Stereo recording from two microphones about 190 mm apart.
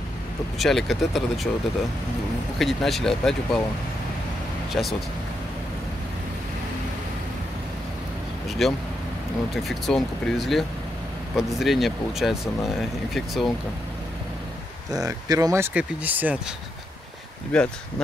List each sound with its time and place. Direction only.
0.6 s speech: centre (ahead or behind)
2.6 s speech: centre (ahead or behind)
4.8 s speech: centre (ahead or behind)
8.6 s speech: centre (ahead or behind)
15.0 s speech: 20° right (ahead or behind)
17.5 s speech: 5° left (ahead or behind)